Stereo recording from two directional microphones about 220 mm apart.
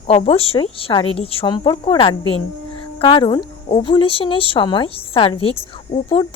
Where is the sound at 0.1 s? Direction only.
25° left (ahead or behind).